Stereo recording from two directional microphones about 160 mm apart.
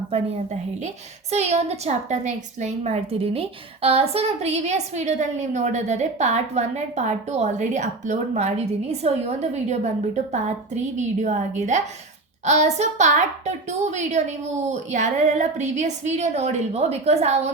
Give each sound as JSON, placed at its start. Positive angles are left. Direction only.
{"t": 0.1, "sound": "a woman's voice", "side_deg": -45}